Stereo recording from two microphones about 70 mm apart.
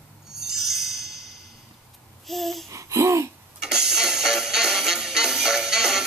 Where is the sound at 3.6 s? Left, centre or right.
Centre.